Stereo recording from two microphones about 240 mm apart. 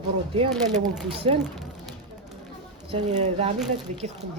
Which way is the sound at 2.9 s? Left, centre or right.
Right.